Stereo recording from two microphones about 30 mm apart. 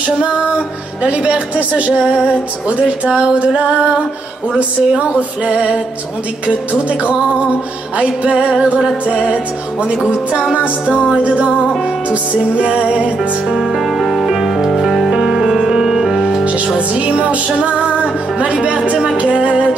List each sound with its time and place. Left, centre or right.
1.1 s music: right
8.4 s music: right
9.0 s music: right
13.7 s music: centre
16.7 s music: right